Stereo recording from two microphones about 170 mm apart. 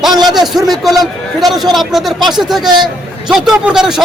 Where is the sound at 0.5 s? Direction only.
Centre (ahead or behind).